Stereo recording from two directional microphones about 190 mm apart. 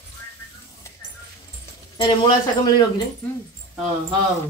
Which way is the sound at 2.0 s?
25° left (ahead or behind).